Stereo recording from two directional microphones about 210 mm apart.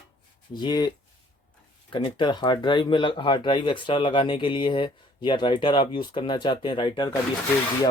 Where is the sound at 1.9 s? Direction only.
20° left (ahead or behind).